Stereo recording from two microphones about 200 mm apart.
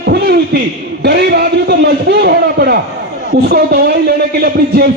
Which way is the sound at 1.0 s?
55° right (ahead or behind).